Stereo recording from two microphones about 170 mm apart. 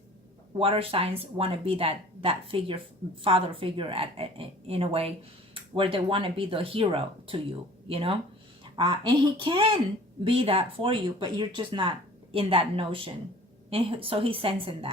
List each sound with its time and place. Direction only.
0.6 s speech: 35° right (ahead or behind)